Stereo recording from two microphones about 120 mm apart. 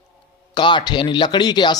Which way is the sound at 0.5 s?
40° left (ahead or behind).